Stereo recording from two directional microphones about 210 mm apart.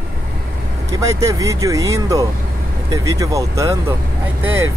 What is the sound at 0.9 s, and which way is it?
Speech, 15° right (ahead or behind).